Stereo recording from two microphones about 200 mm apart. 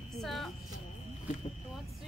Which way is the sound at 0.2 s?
Centre (ahead or behind).